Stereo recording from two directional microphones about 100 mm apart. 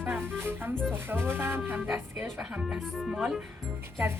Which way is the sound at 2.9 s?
Centre (ahead or behind).